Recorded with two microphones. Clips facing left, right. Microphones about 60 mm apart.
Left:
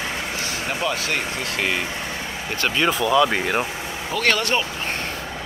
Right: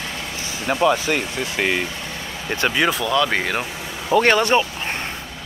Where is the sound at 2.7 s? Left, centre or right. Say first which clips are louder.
Even; centre.